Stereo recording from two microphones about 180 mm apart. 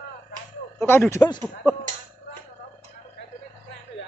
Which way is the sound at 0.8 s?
10° left (ahead or behind).